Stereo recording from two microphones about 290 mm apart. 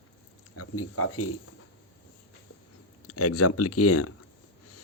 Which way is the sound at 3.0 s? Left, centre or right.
Left.